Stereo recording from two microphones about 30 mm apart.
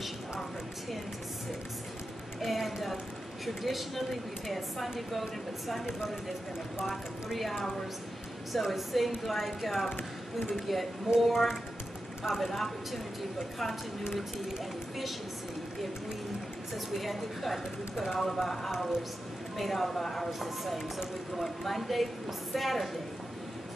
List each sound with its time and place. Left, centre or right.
2.4 s a woman's voice: centre
6.8 s a woman's voice: centre
8.7 s a woman's voice: centre
16.7 s a woman's voice: centre
20.2 s a woman's voice: centre